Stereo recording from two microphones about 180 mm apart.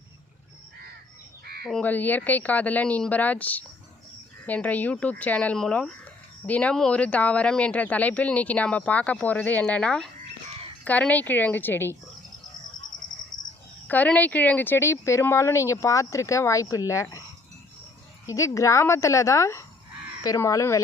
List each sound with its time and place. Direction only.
1.6 s speech: 5° left (ahead or behind)
13.3 s cricket: 45° left (ahead or behind)
13.8 s speech: 10° left (ahead or behind)
18.3 s speech: 15° left (ahead or behind)